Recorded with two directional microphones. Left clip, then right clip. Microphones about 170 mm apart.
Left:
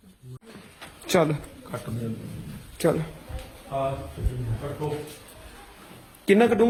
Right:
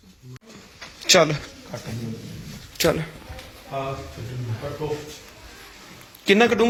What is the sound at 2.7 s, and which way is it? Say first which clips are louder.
Speech: right 3 dB; 5° left (ahead or behind).